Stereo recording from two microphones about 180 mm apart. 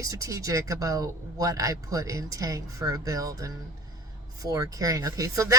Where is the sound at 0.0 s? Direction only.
20° right (ahead or behind).